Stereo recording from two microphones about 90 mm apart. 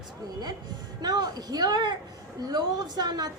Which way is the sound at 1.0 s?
50° right (ahead or behind).